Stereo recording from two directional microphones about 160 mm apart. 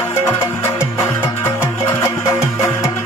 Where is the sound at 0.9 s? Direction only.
15° left (ahead or behind).